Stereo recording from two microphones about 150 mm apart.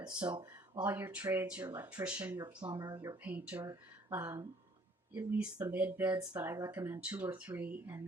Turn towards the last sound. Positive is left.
turn(degrees=-10)  # may be behind; listen again after turning